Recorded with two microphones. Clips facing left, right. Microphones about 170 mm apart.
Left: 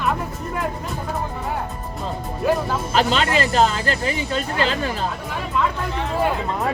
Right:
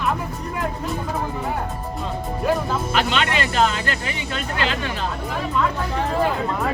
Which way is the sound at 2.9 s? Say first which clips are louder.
Left 4 dB; 35° left (ahead or behind).